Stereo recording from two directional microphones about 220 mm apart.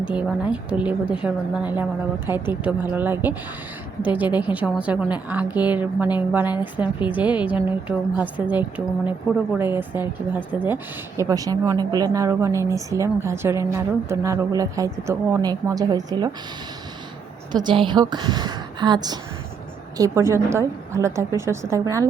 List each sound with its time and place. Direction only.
0.0 s a woman's voice: 5° right (ahead or behind)
17.5 s a woman's voice: 20° right (ahead or behind)